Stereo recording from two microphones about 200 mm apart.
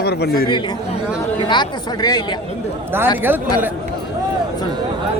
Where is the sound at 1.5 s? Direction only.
20° left (ahead or behind).